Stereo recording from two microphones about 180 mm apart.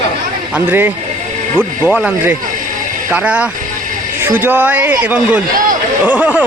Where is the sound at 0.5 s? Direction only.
10° right (ahead or behind).